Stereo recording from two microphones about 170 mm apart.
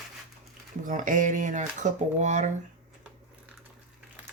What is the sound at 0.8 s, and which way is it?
Speech, 50° right (ahead or behind).